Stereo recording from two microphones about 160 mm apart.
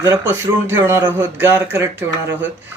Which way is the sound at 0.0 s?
20° right (ahead or behind).